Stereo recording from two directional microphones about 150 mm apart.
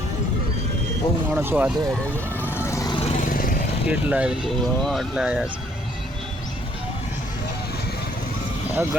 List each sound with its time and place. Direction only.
1.3 s speech: 15° right (ahead or behind)
2.4 s vehicle: 15° left (ahead or behind)
2.9 s vehicle: 45° left (ahead or behind)
3.2 s vehicle: 70° left (ahead or behind)
3.8 s speech: 10° right (ahead or behind)
8.7 s speech: 15° right (ahead or behind)